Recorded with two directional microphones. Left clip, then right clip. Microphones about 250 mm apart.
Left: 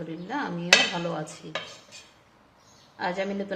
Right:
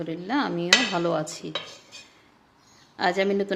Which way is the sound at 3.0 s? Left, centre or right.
Right.